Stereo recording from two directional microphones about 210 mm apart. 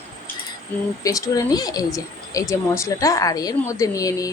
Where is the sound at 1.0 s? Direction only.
15° left (ahead or behind).